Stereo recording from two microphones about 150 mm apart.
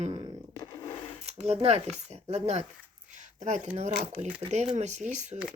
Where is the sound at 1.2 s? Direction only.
45° right (ahead or behind).